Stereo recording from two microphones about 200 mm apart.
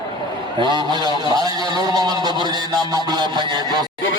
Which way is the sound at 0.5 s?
20° right (ahead or behind).